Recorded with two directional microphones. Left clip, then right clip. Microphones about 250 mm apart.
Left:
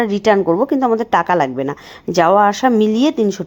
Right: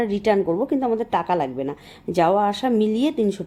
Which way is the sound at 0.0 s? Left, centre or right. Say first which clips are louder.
Left 6 dB; centre.